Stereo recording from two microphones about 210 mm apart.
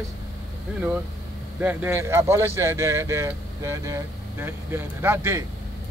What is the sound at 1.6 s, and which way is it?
Speech, 10° right (ahead or behind).